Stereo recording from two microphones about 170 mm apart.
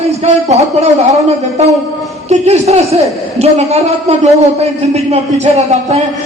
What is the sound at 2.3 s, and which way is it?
A man's voice, 40° right (ahead or behind).